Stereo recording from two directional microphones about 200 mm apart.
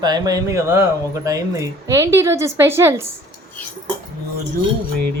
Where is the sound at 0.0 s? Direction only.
20° right (ahead or behind).